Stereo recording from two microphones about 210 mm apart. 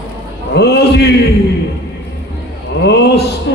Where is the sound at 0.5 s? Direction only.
50° left (ahead or behind).